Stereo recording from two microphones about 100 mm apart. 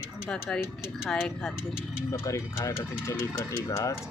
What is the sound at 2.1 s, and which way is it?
Speech, 30° left (ahead or behind).